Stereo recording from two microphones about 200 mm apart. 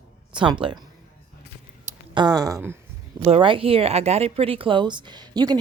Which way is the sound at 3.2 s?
30° right (ahead or behind).